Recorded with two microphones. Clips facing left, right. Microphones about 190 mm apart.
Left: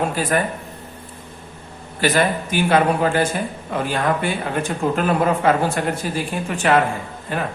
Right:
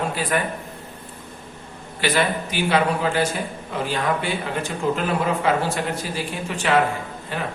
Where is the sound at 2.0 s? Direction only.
45° left (ahead or behind).